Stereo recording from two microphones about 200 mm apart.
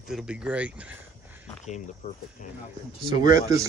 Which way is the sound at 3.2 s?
15° right (ahead or behind).